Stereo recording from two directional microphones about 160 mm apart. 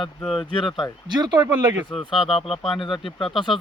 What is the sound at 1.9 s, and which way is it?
Speech, centre (ahead or behind).